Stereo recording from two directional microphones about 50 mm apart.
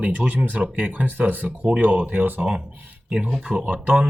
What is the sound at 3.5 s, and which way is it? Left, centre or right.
Speech, centre.